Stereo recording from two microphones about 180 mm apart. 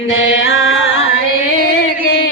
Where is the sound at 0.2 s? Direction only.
90° left.